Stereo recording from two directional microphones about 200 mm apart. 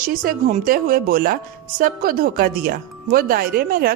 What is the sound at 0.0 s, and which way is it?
A woman's voice, 45° right (ahead or behind).